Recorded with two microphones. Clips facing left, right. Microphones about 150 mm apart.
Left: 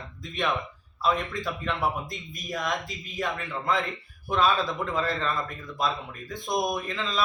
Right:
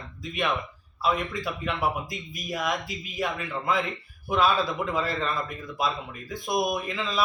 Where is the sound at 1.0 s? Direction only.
5° right (ahead or behind).